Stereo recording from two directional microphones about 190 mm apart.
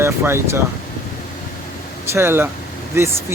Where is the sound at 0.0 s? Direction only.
15° right (ahead or behind).